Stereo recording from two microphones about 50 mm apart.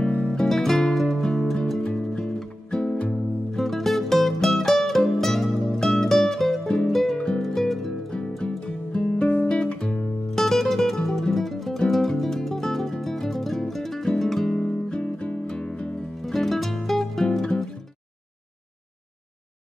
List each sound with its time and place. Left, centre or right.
0.3 s music: centre
2.8 s music: left
3.5 s music: centre
7.2 s music: centre
8.5 s music: centre
9.5 s guitar: centre
10.4 s music: centre
16.2 s music: centre